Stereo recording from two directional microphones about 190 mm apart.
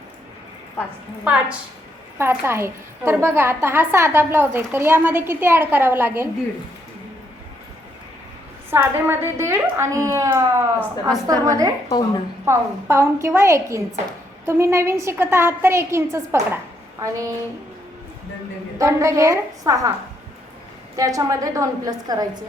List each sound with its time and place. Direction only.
1.2 s a woman's voice: 5° right (ahead or behind)
8.7 s a woman's voice: 10° right (ahead or behind)
11.9 s a woman's voice: 20° left (ahead or behind)
12.5 s a woman's voice: 15° right (ahead or behind)
18.8 s a woman's voice: 15° right (ahead or behind)
20.9 s a woman's voice: 20° right (ahead or behind)